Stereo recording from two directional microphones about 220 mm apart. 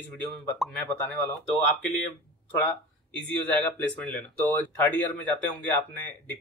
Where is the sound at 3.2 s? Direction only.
5° left (ahead or behind).